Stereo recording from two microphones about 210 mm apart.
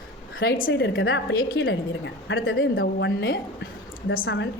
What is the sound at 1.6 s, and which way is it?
A woman's voice, 60° left (ahead or behind).